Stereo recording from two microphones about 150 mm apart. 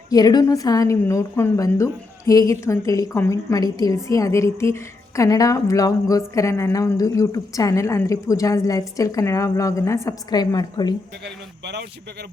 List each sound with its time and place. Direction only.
0.1 s a woman's voice: 25° left (ahead or behind)